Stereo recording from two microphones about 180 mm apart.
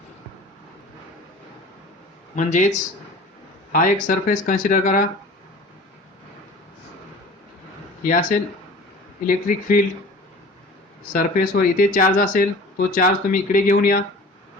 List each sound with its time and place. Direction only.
2.3 s speech: 45° left (ahead or behind)
8.0 s speech: 50° left (ahead or behind)
11.1 s speech: 55° left (ahead or behind)